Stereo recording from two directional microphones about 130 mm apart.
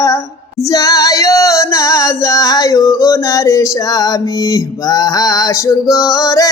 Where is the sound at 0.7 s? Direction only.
25° left (ahead or behind).